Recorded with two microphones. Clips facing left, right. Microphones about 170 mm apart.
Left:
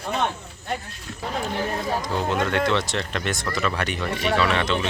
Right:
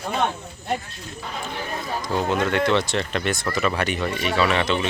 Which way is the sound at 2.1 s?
5° right (ahead or behind).